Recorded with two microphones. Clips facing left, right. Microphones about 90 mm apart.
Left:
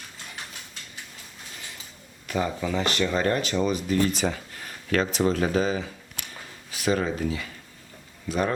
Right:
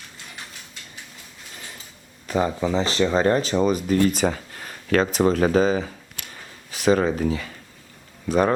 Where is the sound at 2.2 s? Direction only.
35° right (ahead or behind).